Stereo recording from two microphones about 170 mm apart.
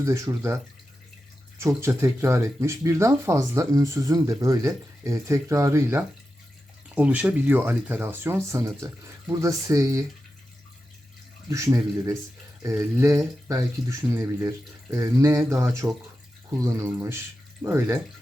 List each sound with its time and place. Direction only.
0.0 s speech: 20° right (ahead or behind)
11.4 s speech: 20° right (ahead or behind)